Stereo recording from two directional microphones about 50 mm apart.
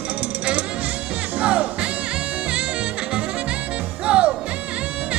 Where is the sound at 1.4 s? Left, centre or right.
Right.